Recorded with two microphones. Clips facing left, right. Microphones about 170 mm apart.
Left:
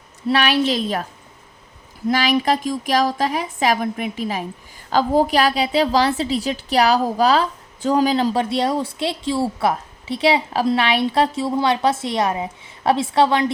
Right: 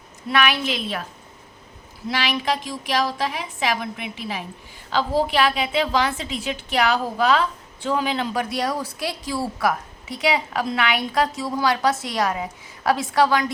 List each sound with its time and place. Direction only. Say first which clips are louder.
0.3 s a woman's voice: left 4 dB; 35° left (ahead or behind)
2.0 s a woman's voice: left 6 dB; 45° left (ahead or behind); by 13.5 s 25° left (ahead or behind)